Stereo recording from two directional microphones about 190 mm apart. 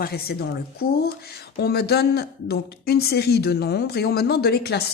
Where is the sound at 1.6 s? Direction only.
55° left (ahead or behind).